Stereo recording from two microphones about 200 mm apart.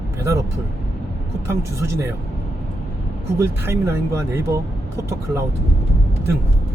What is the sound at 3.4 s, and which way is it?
Speech, 10° right (ahead or behind).